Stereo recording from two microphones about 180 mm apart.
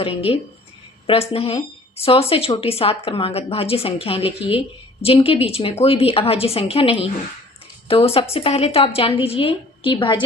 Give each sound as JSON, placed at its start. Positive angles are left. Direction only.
{"t": 0.3, "sound": "a woman's voice", "side_deg": 30}